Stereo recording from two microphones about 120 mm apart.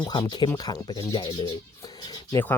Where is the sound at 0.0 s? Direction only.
35° left (ahead or behind).